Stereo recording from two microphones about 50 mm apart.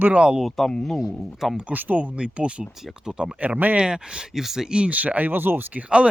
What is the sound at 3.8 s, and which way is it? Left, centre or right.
Speech, centre.